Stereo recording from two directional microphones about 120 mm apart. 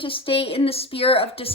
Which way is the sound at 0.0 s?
50° left (ahead or behind).